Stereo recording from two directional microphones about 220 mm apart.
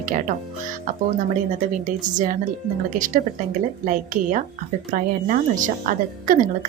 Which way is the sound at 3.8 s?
35° right (ahead or behind).